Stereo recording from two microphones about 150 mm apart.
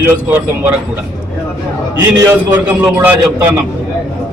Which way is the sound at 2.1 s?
15° right (ahead or behind).